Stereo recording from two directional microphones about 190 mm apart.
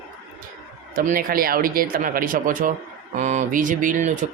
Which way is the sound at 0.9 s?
45° right (ahead or behind).